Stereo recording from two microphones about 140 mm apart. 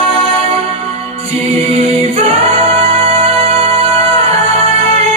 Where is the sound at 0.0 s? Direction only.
45° right (ahead or behind).